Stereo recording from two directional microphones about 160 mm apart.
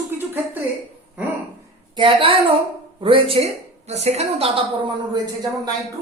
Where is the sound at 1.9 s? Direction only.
35° right (ahead or behind).